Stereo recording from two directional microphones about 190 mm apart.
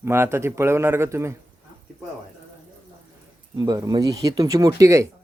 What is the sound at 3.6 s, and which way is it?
Speech, 20° right (ahead or behind).